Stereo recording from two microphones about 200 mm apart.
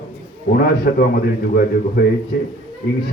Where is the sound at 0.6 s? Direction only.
50° left (ahead or behind).